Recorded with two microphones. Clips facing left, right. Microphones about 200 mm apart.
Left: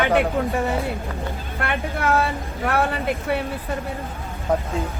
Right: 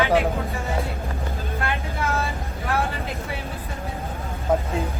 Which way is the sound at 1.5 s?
65° left (ahead or behind).